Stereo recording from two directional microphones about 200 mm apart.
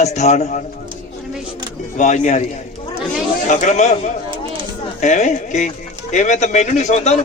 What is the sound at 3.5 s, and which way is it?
Speech, 35° left (ahead or behind).